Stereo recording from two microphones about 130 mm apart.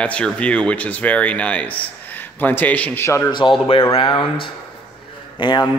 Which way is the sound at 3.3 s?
40° left (ahead or behind).